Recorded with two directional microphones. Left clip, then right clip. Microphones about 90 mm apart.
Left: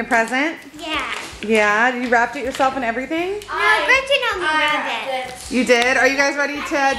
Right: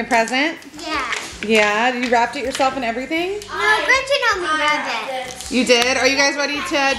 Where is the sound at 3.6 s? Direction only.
15° left (ahead or behind).